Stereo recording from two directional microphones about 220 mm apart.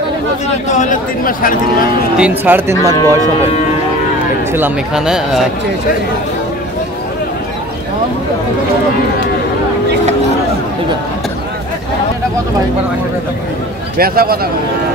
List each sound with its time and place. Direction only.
0.7 s speech: 35° left (ahead or behind)
2.1 s speech: 5° right (ahead or behind)
4.5 s speech: 10° right (ahead or behind)
13.9 s a man's voice: 45° right (ahead or behind)